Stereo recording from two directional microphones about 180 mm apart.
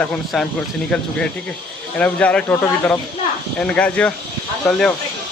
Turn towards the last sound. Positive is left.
turn(degrees=0)  # may be behind; listen again after turning